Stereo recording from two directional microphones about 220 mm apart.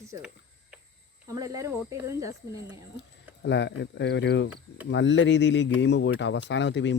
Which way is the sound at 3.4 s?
55° left (ahead or behind).